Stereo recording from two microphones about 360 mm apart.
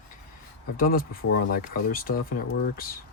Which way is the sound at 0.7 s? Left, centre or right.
Left.